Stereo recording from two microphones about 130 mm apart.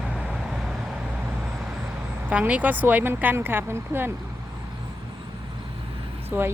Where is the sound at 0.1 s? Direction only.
5° right (ahead or behind).